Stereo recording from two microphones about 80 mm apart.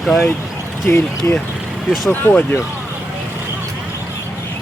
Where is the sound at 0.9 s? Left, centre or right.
Left.